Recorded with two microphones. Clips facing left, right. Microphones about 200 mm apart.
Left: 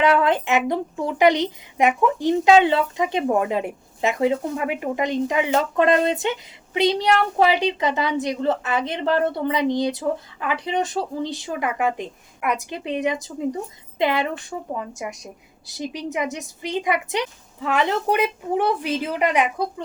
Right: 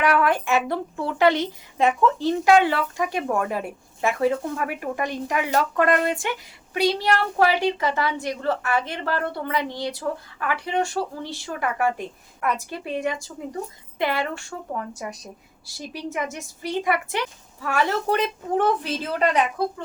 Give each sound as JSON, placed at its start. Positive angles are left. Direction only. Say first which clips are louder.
{"t": 0.0, "sound": "a woman's voice", "louder": "left 3 dB", "side_deg": 25}